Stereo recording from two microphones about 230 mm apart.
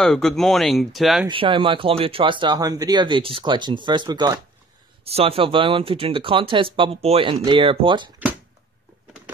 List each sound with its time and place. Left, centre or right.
0.0 s speech: centre
1.2 s speech: right